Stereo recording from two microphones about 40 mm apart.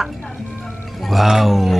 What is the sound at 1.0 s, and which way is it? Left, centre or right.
Speech, centre.